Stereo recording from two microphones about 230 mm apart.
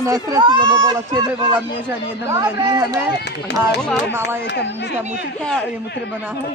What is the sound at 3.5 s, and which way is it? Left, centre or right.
Speech, left.